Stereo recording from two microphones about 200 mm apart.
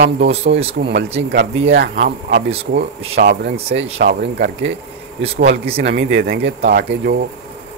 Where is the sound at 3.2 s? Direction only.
45° right (ahead or behind).